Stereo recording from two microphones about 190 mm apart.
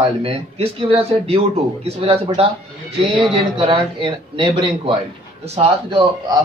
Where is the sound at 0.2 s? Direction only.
30° right (ahead or behind).